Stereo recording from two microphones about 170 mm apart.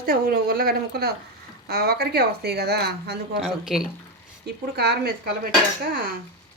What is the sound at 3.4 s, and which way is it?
Speech, 5° right (ahead or behind).